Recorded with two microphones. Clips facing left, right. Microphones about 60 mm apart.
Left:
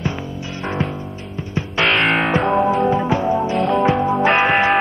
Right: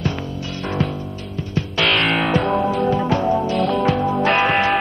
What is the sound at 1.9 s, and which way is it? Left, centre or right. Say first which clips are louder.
Music: left 2 dB; centre.